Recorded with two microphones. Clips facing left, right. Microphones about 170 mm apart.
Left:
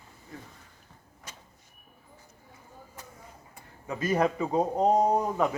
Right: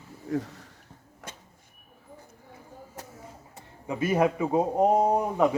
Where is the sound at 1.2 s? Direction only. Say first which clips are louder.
Right 5 dB; 75° right (ahead or behind).